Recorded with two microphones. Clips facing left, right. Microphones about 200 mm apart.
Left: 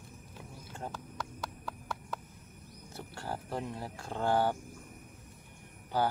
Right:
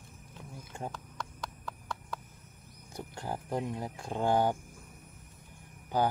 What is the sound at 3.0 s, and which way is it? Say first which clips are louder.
Speech: right 2 dB; 15° right (ahead or behind).